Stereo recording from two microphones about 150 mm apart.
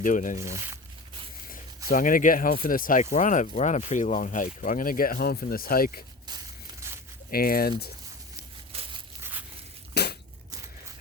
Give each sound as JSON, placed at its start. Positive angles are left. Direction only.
{"t": 0.0, "sound": "speech", "side_deg": 60}
{"t": 0.3, "sound": "speech", "side_deg": -20}
{"t": 1.9, "sound": "speech", "side_deg": 65}
{"t": 6.2, "sound": "a sound", "side_deg": -25}
{"t": 7.3, "sound": "speech", "side_deg": 80}
{"t": 8.7, "sound": "crushing", "side_deg": -40}
{"t": 9.9, "sound": "crushing", "side_deg": 90}